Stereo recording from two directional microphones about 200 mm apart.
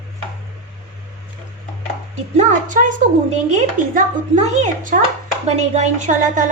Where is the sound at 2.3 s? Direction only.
35° right (ahead or behind).